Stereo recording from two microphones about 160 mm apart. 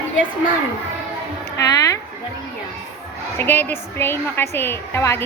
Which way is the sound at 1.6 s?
20° left (ahead or behind).